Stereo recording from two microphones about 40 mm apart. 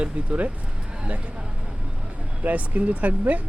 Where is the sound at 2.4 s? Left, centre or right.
Right.